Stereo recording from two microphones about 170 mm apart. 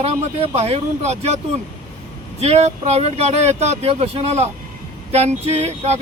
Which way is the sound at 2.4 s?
40° right (ahead or behind).